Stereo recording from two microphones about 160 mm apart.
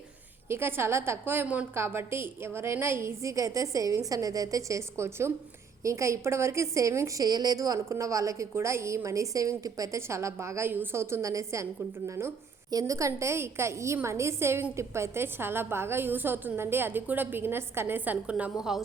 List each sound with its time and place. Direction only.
0.4 s a woman's voice: 15° right (ahead or behind)